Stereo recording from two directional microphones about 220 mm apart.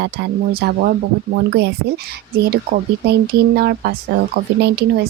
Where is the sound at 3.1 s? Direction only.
45° right (ahead or behind).